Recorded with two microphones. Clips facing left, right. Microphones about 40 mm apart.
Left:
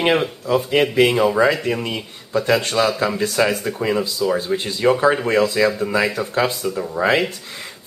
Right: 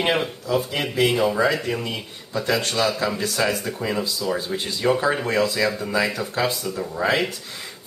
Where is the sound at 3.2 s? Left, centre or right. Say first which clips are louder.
Left 4 dB; left.